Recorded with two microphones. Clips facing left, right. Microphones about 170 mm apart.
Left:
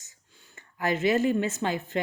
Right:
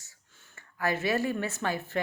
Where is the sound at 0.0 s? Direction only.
15° left (ahead or behind).